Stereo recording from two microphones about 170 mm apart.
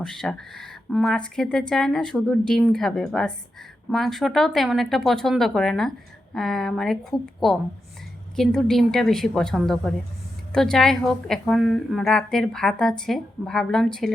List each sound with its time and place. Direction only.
0.0 s a woman's voice: 5° left (ahead or behind)